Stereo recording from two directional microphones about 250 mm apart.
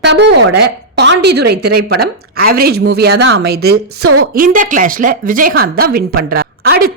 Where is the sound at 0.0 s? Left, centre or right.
Right.